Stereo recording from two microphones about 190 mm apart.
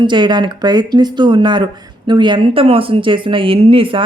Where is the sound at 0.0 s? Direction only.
25° right (ahead or behind).